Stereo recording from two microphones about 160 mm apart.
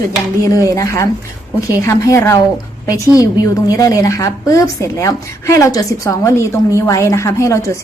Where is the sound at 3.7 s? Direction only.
20° left (ahead or behind).